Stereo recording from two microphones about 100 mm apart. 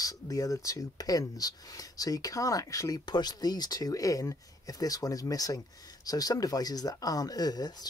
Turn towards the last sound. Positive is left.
turn(degrees=40)  # may be behind; listen again after turning